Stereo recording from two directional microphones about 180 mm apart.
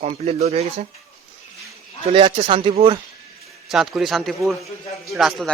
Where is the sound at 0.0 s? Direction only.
35° right (ahead or behind).